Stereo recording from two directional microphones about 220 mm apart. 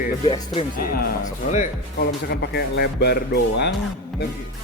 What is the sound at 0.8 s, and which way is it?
Speech, 40° left (ahead or behind).